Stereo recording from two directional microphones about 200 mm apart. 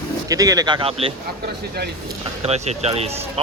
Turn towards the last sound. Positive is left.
turn(degrees=-30)  # may be behind; listen again after turning